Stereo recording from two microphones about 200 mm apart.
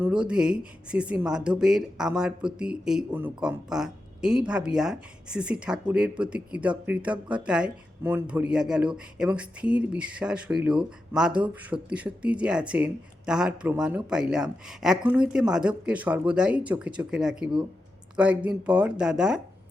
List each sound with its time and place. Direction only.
0.0 s speech: 5° right (ahead or behind)